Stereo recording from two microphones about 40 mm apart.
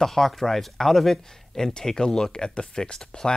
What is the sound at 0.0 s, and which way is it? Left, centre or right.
Speech, centre.